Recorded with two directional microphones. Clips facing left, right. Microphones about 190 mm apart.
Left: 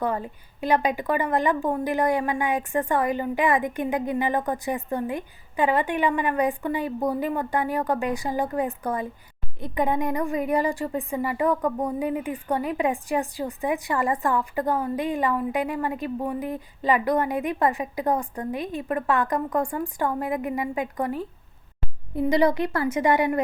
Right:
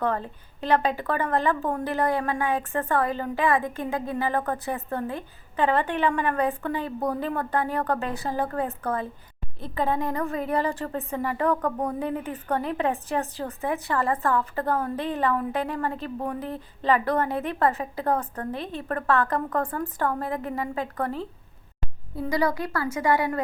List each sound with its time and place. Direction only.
0.0 s a woman's voice: 10° left (ahead or behind)